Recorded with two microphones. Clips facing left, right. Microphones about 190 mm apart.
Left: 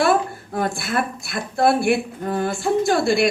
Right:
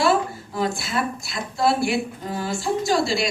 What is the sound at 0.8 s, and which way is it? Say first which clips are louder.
Speech: left 2 dB; 55° left (ahead or behind).